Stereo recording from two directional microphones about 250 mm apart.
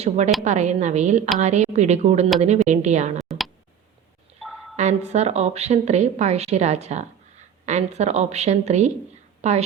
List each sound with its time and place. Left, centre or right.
0.4 s a woman's voice: right
3.2 s a sound: centre
4.8 s a woman's voice: right